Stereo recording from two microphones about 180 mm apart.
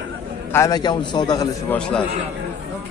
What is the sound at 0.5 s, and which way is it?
A man's voice, 20° left (ahead or behind).